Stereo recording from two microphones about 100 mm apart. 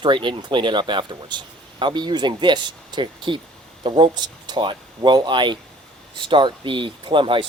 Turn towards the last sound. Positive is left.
turn(degrees=-55)  # may be behind; listen again after turning